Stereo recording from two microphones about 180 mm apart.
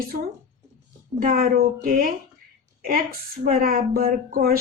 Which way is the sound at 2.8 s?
55° right (ahead or behind).